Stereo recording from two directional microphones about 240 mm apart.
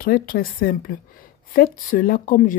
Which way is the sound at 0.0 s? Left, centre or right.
Left.